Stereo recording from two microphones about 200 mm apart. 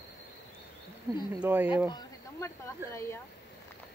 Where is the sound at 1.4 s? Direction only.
10° right (ahead or behind).